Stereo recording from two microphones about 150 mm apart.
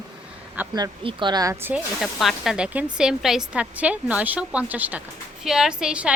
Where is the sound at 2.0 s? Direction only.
Centre (ahead or behind).